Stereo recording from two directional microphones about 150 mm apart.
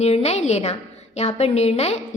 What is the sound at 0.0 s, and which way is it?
A woman's voice, 45° left (ahead or behind).